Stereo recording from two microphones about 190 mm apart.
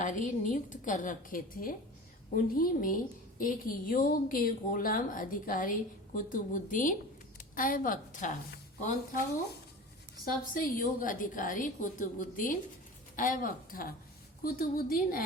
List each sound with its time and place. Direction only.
0.0 s a woman's voice: 40° left (ahead or behind)
10.5 s a woman's voice: 45° left (ahead or behind)